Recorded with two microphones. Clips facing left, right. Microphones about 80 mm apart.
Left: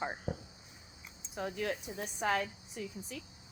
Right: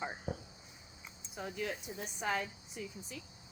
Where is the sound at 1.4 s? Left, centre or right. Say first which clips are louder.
Left 3 dB; left.